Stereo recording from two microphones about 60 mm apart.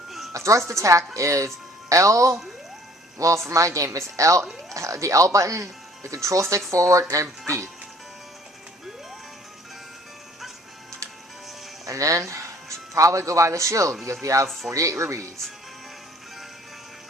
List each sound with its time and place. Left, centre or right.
0.3 s speech: right
11.9 s music: right
12.9 s speech: right